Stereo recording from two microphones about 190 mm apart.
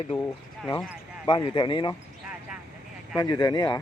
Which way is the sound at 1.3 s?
25° left (ahead or behind).